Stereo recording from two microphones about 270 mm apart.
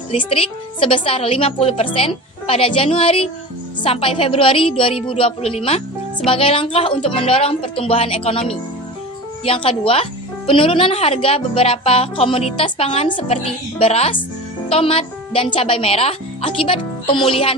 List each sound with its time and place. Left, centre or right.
0.1 s a woman's voice: centre